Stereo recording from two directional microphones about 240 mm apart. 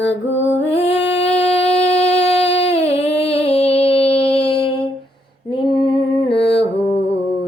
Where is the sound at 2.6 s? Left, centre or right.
Left.